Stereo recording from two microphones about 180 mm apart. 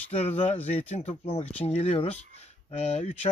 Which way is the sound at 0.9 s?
35° left (ahead or behind).